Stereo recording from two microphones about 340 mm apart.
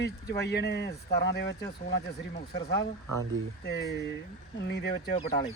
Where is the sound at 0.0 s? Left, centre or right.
Left.